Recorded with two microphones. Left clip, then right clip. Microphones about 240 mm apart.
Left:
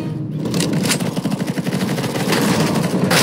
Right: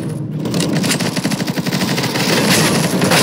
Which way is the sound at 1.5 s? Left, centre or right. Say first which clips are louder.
Right 3 dB; right.